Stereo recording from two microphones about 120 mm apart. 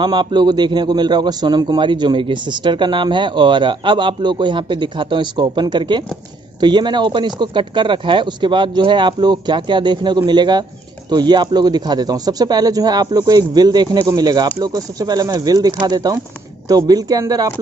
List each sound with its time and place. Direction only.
0.0 s a man's voice: 40° right (ahead or behind)